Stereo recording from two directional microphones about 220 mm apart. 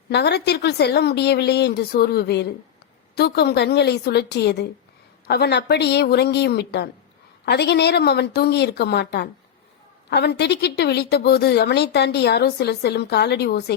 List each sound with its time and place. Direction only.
0.1 s a woman's voice: 50° left (ahead or behind)